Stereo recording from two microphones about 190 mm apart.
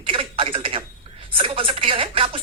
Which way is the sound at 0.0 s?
30° right (ahead or behind).